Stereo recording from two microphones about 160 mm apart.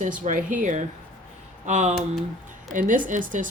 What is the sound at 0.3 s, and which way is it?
Speech, 55° right (ahead or behind).